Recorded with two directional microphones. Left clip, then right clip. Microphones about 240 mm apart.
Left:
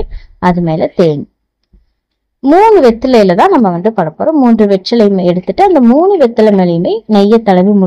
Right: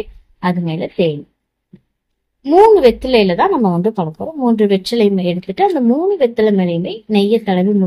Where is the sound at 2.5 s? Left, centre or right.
Left.